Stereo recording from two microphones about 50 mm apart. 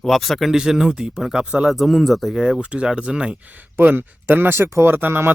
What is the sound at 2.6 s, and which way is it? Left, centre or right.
Speech, right.